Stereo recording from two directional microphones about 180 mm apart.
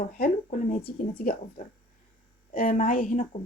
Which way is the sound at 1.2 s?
50° left (ahead or behind).